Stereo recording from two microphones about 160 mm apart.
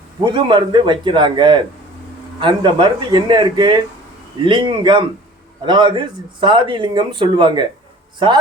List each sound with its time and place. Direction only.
0.2 s speech: 30° right (ahead or behind)